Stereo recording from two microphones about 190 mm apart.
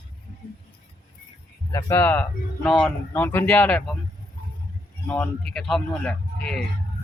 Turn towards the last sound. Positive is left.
turn(degrees=5)  # may be behind; listen again after turning